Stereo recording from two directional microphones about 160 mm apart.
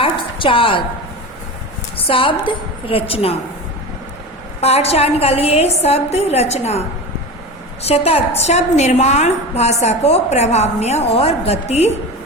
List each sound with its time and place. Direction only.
0.0 s a sound: 35° left (ahead or behind)
2.0 s a woman's voice: 35° left (ahead or behind)
4.6 s a woman's voice: 40° left (ahead or behind)